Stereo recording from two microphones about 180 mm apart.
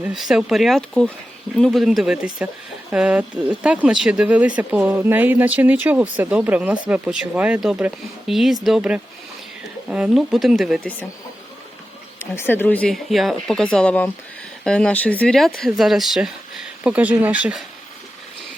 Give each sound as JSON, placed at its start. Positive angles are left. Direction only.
{"t": 0.0, "sound": "speech", "side_deg": 0}
{"t": 12.2, "sound": "speech", "side_deg": 15}